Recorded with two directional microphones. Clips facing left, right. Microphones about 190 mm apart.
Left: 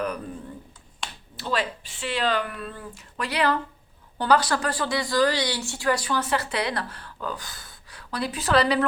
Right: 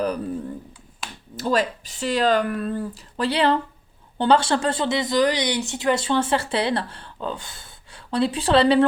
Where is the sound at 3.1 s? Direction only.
30° right (ahead or behind).